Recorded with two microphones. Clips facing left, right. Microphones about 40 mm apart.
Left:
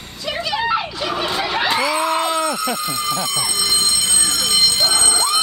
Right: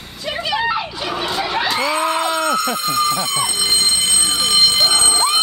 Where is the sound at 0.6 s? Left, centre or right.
Centre.